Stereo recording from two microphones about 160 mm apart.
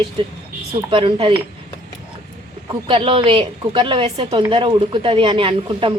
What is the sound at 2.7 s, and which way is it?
A woman's voice, 35° right (ahead or behind).